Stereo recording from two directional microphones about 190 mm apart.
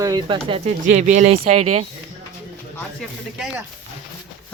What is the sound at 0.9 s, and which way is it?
Speech, 40° right (ahead or behind).